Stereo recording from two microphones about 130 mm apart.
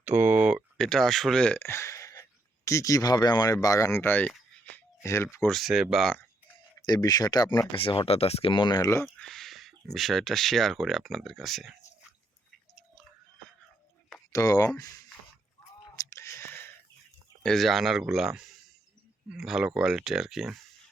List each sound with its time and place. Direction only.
0.0 s speech: 15° right (ahead or behind)
0.8 s speech: 5° left (ahead or behind)
1.5 s a sound: 20° left (ahead or behind)
2.6 s speech: 25° left (ahead or behind)
5.5 s speech: centre (ahead or behind)
6.7 s speech: 30° left (ahead or behind)
9.1 s speech: 5° left (ahead or behind)
14.3 s speech: 25° left (ahead or behind)
16.0 s a sound: 25° left (ahead or behind)
17.4 s speech: 5° left (ahead or behind)